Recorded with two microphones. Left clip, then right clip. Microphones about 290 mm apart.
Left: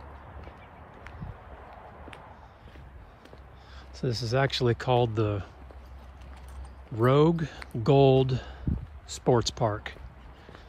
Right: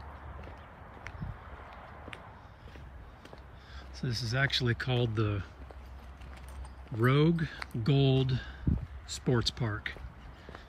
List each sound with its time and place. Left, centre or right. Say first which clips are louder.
4.0 s speech: left 5 dB; centre
7.0 s speech: left 6 dB; centre